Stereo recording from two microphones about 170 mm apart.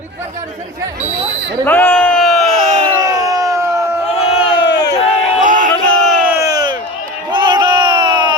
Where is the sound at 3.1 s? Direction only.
20° right (ahead or behind).